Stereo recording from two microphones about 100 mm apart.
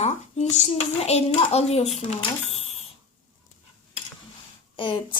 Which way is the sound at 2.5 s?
90° left.